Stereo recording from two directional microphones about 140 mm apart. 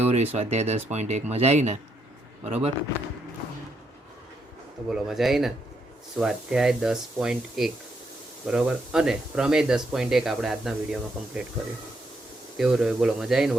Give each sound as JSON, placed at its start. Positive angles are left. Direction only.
{"t": 0.0, "sound": "speech", "side_deg": -50}
{"t": 4.9, "sound": "speech", "side_deg": -5}
{"t": 12.5, "sound": "speech", "side_deg": -5}